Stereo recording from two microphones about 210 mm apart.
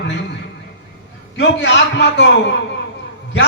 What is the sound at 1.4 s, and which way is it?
A man's voice, 55° left (ahead or behind).